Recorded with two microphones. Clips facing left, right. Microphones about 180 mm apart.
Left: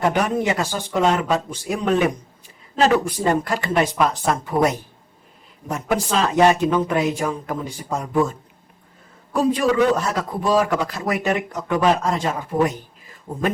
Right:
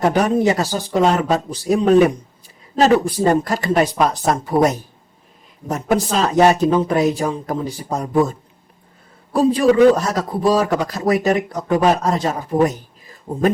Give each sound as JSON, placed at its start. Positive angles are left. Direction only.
{"t": 0.0, "sound": "a man's voice", "side_deg": -35}